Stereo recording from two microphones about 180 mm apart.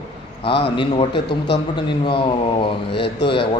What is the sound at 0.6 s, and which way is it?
Speech, 30° left (ahead or behind).